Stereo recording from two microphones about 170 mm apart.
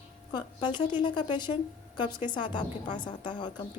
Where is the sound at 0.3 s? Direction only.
25° left (ahead or behind).